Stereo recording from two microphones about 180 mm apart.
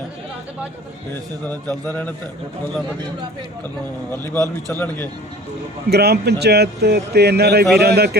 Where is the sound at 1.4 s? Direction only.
10° left (ahead or behind).